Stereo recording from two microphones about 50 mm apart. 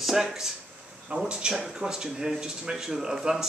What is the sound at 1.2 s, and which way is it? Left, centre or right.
Speech, centre.